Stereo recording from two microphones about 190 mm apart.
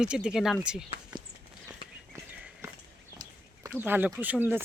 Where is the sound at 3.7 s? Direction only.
10° right (ahead or behind).